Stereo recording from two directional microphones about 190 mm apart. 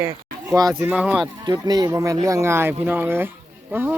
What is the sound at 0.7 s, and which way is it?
Speech, 5° right (ahead or behind).